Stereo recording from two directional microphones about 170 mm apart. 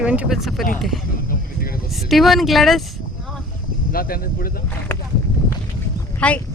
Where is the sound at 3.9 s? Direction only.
60° left (ahead or behind).